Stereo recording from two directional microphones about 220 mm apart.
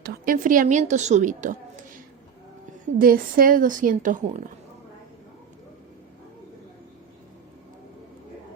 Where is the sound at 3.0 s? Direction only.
40° right (ahead or behind).